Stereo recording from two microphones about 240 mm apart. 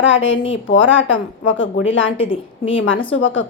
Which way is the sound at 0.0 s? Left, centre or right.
Left.